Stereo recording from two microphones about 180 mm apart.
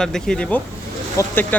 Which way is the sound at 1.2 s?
15° left (ahead or behind).